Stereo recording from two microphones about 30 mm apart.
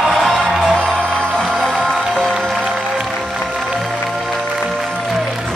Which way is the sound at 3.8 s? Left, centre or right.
Centre.